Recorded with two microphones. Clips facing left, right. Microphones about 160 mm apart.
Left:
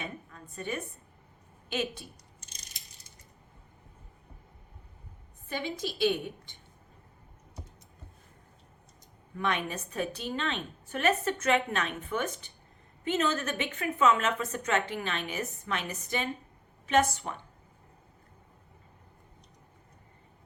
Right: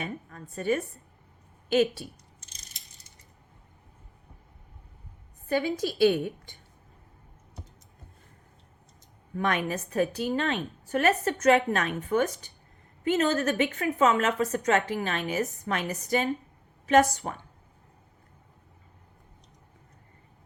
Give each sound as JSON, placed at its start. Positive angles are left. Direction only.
{"t": 0.0, "sound": "speech", "side_deg": -40}
{"t": 5.5, "sound": "a woman's voice", "side_deg": -45}
{"t": 9.4, "sound": "a woman's voice", "side_deg": -45}